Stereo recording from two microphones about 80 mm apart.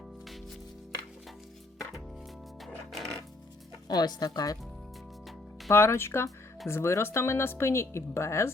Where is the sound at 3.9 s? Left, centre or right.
Left.